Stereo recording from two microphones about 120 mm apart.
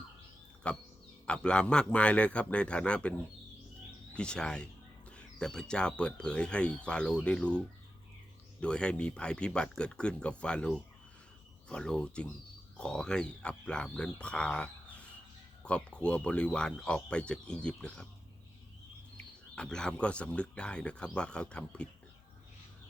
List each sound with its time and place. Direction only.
0.7 s speech: 10° left (ahead or behind)
8.6 s speech: 10° left (ahead or behind)
19.1 s speech: 5° left (ahead or behind)